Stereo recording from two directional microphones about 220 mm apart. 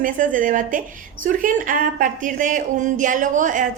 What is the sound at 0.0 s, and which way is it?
A woman's voice, 35° right (ahead or behind).